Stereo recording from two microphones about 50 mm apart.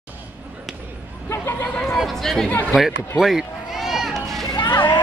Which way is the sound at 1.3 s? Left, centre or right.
Left.